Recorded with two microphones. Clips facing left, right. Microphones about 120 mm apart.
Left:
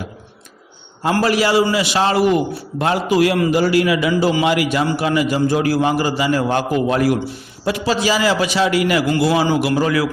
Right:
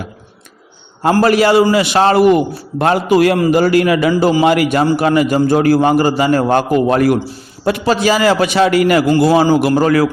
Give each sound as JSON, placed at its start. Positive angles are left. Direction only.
{"t": 1.2, "sound": "a man's voice", "side_deg": -55}